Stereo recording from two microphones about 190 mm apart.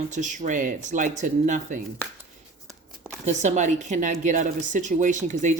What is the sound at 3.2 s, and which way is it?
Speech, 40° right (ahead or behind).